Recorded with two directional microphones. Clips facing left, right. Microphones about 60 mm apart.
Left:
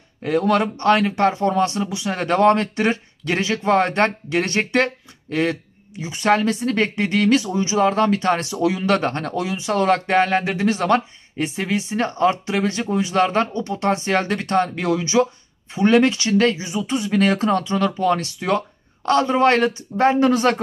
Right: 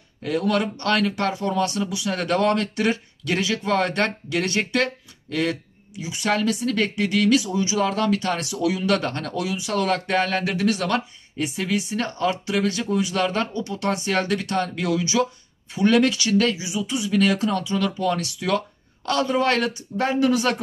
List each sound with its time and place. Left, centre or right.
0.2 s speech: left